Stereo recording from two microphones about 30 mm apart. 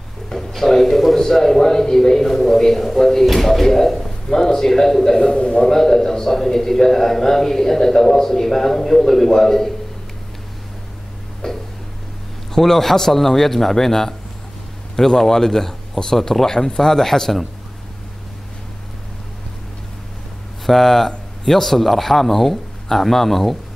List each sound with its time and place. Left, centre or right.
0.3 s music: centre
1.2 s a man's voice: centre
5.2 s a man's voice: left
5.7 s a man's voice: centre
11.4 s a sound: centre
12.5 s a man's voice: centre
20.6 s a man's voice: centre